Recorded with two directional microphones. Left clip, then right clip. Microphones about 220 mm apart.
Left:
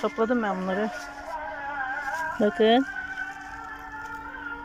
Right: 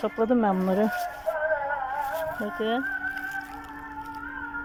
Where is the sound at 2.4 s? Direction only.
15° left (ahead or behind).